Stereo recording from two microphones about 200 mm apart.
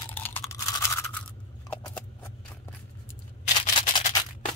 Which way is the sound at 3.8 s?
25° left (ahead or behind).